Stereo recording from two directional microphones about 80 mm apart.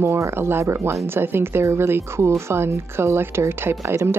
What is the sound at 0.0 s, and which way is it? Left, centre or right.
Speech, right.